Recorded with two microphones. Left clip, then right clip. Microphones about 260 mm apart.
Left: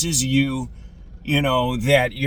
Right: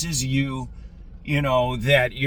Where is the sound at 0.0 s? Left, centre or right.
Centre.